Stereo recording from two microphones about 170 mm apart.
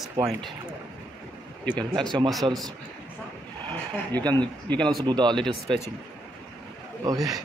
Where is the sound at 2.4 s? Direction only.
30° right (ahead or behind).